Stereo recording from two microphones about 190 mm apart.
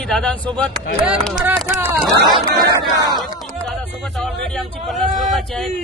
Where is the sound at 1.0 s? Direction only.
5° right (ahead or behind).